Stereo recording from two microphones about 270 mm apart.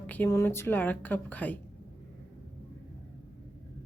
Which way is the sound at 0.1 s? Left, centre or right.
Centre.